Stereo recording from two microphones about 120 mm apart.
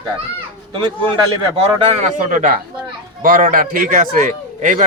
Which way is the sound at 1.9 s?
75° right (ahead or behind).